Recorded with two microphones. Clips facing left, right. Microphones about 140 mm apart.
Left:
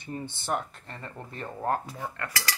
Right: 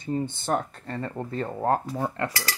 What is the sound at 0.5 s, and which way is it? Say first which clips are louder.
Speech: right 2 dB; 40° right (ahead or behind).